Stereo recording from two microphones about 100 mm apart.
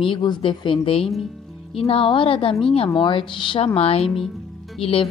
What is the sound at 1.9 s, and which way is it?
Speech, 65° left (ahead or behind).